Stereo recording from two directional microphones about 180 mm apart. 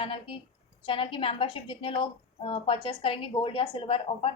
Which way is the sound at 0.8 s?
30° left (ahead or behind).